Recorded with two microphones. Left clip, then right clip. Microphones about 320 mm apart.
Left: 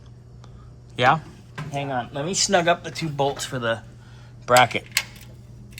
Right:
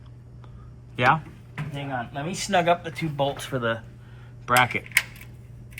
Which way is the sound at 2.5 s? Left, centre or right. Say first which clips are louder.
Even; centre.